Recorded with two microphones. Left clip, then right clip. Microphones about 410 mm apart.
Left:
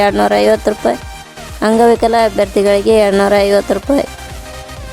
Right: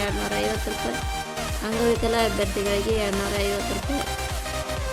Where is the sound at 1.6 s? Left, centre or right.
Left.